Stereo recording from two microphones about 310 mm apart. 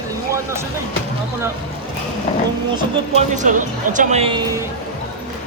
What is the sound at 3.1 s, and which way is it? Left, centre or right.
Speech, right.